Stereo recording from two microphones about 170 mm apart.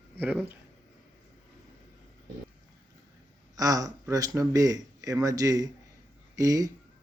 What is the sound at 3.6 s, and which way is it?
Speech, 20° right (ahead or behind).